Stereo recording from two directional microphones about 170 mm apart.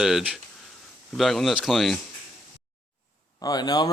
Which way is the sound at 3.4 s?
25° left (ahead or behind).